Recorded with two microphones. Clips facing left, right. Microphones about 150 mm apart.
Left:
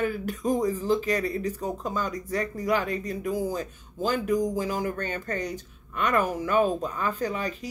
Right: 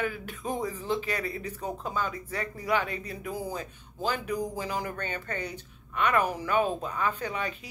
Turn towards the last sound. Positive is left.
turn(degrees=40)  # may be behind; listen again after turning